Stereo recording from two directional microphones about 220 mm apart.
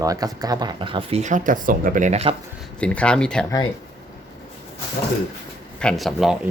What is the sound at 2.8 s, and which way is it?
Speech, 5° left (ahead or behind).